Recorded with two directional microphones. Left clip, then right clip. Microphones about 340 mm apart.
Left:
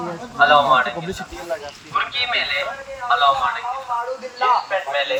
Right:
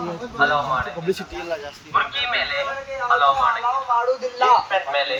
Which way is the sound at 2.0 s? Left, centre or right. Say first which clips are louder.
Even; left.